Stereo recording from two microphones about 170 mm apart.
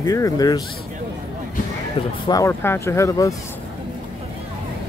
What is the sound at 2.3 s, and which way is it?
Speech, 15° left (ahead or behind).